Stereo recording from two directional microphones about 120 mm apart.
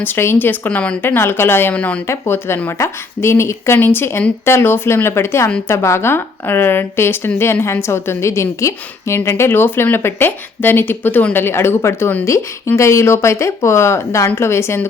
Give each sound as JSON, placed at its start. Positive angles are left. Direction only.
{"t": 0.0, "sound": "a woman's voice", "side_deg": 20}